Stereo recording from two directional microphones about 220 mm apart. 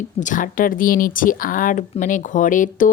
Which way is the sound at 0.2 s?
35° left (ahead or behind).